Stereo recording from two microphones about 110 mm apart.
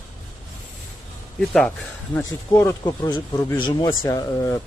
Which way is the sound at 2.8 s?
40° left (ahead or behind).